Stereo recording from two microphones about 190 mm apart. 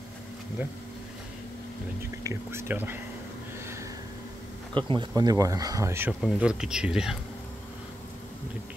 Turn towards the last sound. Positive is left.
turn(degrees=-5)  # may be behind; listen again after turning